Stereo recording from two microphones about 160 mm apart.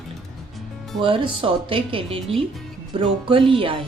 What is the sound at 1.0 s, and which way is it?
Speech, 30° right (ahead or behind).